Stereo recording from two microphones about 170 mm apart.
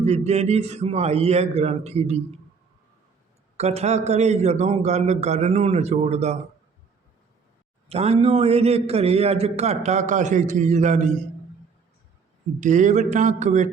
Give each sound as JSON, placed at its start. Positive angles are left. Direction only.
{"t": 0.0, "sound": "a man's voice", "side_deg": -40}
{"t": 3.6, "sound": "a man's voice", "side_deg": -40}
{"t": 7.9, "sound": "a man's voice", "side_deg": -35}
{"t": 12.5, "sound": "a man's voice", "side_deg": -45}